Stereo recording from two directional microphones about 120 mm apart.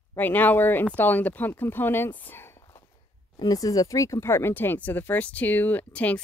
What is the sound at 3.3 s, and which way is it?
Speech, 30° left (ahead or behind).